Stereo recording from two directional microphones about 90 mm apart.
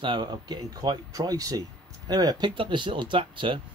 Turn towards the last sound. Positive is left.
turn(degrees=-70)  # may be behind; listen again after turning